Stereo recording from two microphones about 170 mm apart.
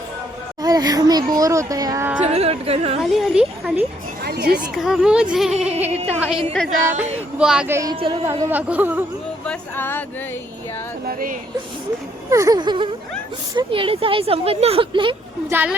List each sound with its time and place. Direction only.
0.6 s speech: 20° right (ahead or behind)
2.2 s speech: 35° right (ahead or behind)
3.0 s speech: centre (ahead or behind)
4.2 s a sound: 65° right (ahead or behind)
4.7 s speech: centre (ahead or behind)
6.7 s speech: 50° right (ahead or behind)
7.3 s speech: 5° right (ahead or behind)
7.7 s speech: 20° right (ahead or behind)
7.9 s speech: 30° right (ahead or behind)
8.2 s speech: 15° right (ahead or behind)
9.5 s speech: 10° left (ahead or behind)
11.0 s speech: 60° right (ahead or behind)
12.3 s speech: 20° right (ahead or behind)
15.4 s speech: 10° right (ahead or behind)